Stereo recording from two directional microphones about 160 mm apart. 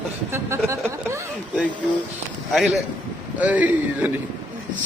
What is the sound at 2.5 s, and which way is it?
Speech, centre (ahead or behind).